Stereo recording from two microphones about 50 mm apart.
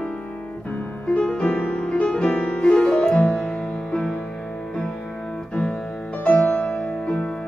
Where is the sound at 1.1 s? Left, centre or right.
Centre.